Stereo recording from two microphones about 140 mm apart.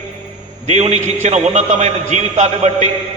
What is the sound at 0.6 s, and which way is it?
A man's voice, 50° right (ahead or behind).